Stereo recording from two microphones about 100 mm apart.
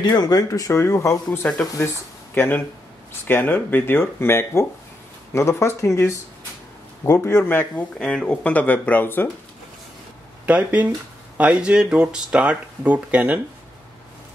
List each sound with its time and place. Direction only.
0.0 s speech: 40° left (ahead or behind); by 7.8 s 20° left (ahead or behind)
8.0 s speech: 10° left (ahead or behind)
10.4 s speech: 15° right (ahead or behind)